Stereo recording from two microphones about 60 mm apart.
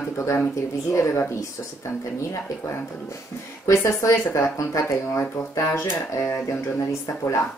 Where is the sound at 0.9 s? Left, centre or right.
Left.